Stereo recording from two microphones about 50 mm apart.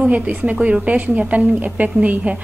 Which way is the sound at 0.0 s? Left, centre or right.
Right.